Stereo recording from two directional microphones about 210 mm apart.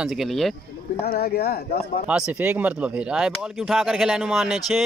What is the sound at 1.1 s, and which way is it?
Speech, 45° left (ahead or behind).